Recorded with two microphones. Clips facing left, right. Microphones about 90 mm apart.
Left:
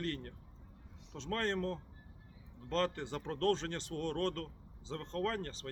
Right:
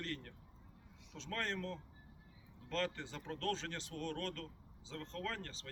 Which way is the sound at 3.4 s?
35° left (ahead or behind).